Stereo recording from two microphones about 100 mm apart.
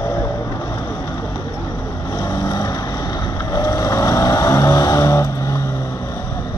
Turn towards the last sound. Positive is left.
turn(degrees=30)  # may be behind; listen again after turning